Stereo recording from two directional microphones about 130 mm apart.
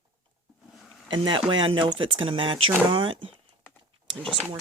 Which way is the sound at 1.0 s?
40° right (ahead or behind).